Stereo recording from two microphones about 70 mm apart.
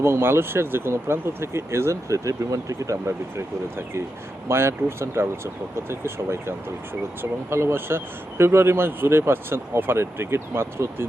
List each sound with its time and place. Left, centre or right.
0.0 s speech: right